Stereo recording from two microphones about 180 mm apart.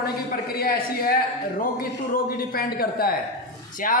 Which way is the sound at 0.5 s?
55° left (ahead or behind).